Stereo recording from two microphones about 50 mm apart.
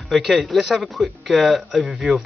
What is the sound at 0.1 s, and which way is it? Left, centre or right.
Speech, centre.